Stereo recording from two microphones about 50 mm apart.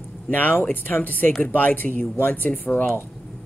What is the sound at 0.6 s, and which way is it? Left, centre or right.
Speech, left.